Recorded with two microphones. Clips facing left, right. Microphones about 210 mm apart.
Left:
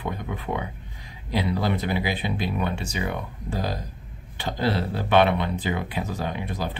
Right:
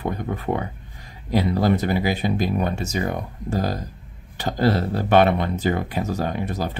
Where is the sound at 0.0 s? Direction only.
45° right (ahead or behind).